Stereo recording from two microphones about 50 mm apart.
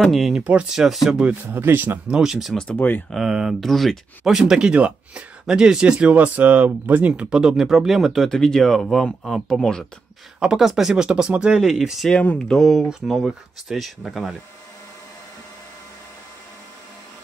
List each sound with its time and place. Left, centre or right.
0.0 s speech: centre
0.4 s speech: right
0.7 s speech: centre
1.4 s speech: right
2.0 s speech: centre
2.7 s speech: left
3.2 s speech: centre
4.6 s speech: right
7.2 s speech: centre
8.3 s speech: centre
10.4 s speech: centre
11.6 s speech: centre
12.4 s speech: centre
12.8 s speech: centre